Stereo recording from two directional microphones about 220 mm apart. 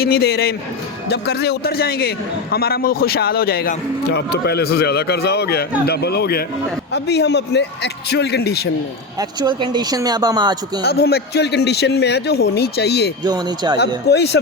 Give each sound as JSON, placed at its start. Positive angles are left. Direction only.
{"t": 0.0, "sound": "a man's voice", "side_deg": 45}
{"t": 9.4, "sound": "speech", "side_deg": -20}
{"t": 10.8, "sound": "a man's voice", "side_deg": 45}
{"t": 13.2, "sound": "speech", "side_deg": -20}
{"t": 13.7, "sound": "a man's voice", "side_deg": 50}